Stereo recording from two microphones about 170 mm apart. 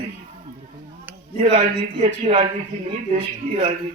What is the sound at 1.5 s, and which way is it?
Speech, 40° right (ahead or behind).